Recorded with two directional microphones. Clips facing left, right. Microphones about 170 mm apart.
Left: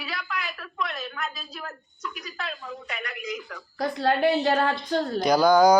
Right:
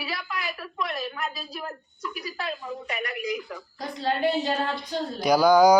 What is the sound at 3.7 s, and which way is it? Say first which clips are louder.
A woman's voice: left 4 dB; 65° left (ahead or behind).